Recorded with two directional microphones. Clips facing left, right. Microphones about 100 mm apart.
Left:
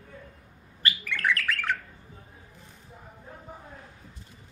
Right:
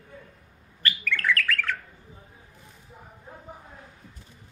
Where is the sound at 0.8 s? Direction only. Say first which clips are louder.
Right 1 dB; 20° left (ahead or behind).